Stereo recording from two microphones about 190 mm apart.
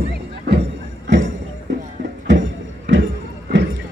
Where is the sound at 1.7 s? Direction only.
70° right (ahead or behind).